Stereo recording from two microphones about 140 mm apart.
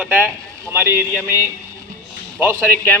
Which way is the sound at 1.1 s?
20° left (ahead or behind).